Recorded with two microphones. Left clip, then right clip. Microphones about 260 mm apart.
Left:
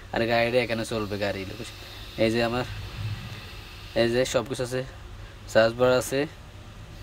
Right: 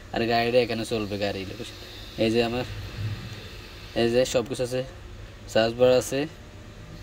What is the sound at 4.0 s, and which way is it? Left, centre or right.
Speech, centre.